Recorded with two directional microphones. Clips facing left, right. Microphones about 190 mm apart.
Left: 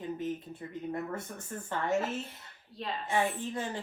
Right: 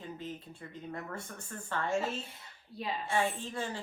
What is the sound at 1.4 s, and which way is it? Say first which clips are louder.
Speech: right 1 dB; 20° left (ahead or behind).